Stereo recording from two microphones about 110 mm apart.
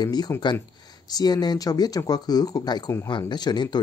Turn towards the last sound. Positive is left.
turn(degrees=40)  # may be behind; listen again after turning